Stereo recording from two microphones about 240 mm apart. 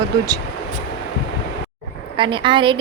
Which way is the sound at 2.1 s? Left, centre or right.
Centre.